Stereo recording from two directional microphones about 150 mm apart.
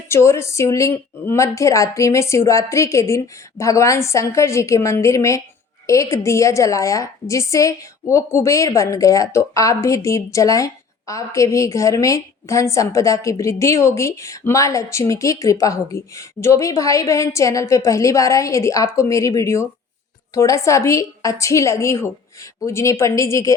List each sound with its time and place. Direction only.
0.1 s a woman's voice: 20° left (ahead or behind)